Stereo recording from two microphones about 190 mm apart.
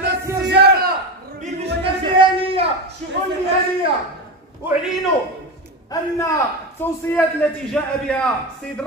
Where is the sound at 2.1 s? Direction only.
30° right (ahead or behind).